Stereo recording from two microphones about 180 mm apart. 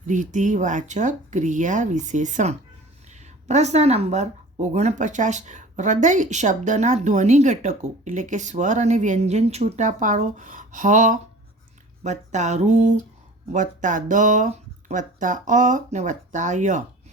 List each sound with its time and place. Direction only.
0.0 s speech: 45° right (ahead or behind)